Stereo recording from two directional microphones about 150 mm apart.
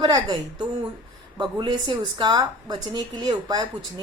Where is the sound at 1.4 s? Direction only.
30° right (ahead or behind).